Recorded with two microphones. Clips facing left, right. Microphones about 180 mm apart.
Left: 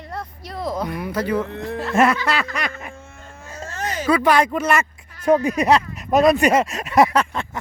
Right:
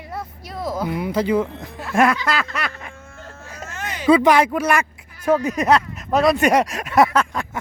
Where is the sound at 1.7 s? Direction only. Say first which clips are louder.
Even; centre (ahead or behind).